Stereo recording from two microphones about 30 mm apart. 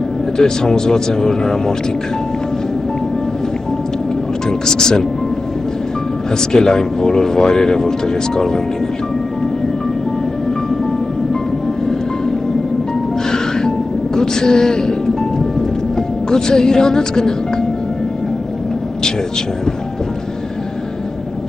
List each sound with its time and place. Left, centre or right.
0.4 s speech: left
4.5 s speech: left
6.5 s speech: left
13.3 s music: left
16.3 s speech: left